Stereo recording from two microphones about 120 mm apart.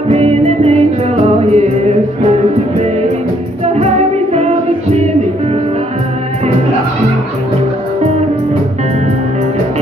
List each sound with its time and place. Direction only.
0.1 s music: 60° right (ahead or behind)
3.6 s music: 65° right (ahead or behind)